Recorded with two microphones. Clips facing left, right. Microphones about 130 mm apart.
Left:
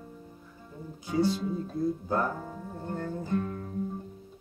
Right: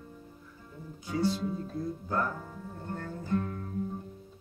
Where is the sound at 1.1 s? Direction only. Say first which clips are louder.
Left 3 dB; 20° left (ahead or behind).